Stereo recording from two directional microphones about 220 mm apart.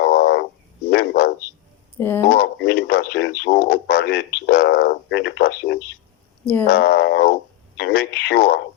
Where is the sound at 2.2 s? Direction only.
45° left (ahead or behind).